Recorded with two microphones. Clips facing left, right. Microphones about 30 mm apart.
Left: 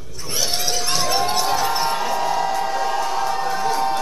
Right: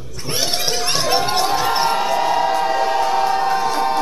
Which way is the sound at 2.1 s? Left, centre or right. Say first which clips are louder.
Right 4 dB; right.